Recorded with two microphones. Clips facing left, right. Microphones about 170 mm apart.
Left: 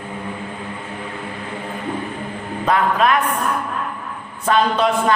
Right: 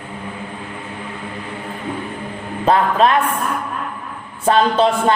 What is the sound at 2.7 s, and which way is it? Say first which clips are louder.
Speech: right 3 dB; 30° right (ahead or behind).